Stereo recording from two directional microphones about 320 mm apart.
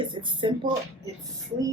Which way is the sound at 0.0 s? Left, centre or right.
Centre.